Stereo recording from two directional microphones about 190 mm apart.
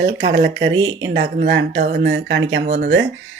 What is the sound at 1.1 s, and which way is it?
Speech, 60° right (ahead or behind).